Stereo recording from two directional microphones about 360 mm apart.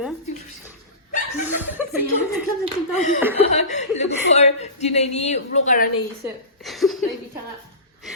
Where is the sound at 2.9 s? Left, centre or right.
Centre.